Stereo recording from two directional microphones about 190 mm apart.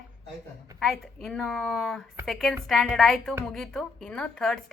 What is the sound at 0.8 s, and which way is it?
A woman's voice, centre (ahead or behind).